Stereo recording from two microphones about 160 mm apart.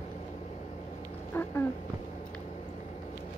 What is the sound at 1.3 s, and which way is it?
Cat, 15° left (ahead or behind).